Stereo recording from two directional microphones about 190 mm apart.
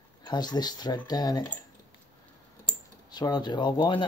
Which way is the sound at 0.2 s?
20° left (ahead or behind).